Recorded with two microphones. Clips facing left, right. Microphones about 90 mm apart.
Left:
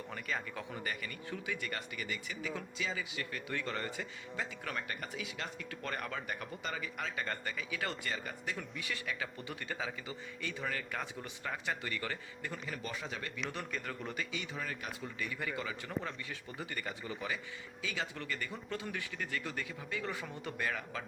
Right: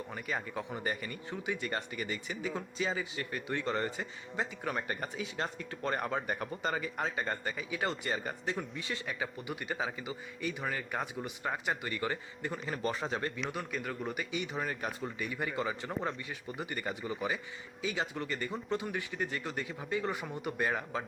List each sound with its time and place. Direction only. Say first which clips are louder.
0.1 s speech: right 2 dB; 15° right (ahead or behind); by 7.3 s 35° right (ahead or behind)
7.3 s speech: right 3 dB; 25° right (ahead or behind)
12.6 s a man's voice: right 9 dB; 35° right (ahead or behind)
13.5 s a man's voice: right 3 dB; 10° right (ahead or behind)
14.5 s a man's voice: right 5 dB; 35° right (ahead or behind)
15.2 s speech: right 4 dB; 25° right (ahead or behind)